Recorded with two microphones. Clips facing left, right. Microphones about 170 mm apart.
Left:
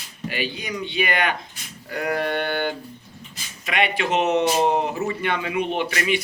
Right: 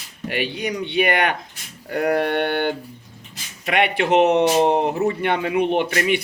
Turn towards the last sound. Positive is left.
turn(degrees=-55)  # may be behind; listen again after turning